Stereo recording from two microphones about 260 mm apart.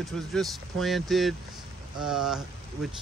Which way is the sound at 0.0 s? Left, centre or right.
Centre.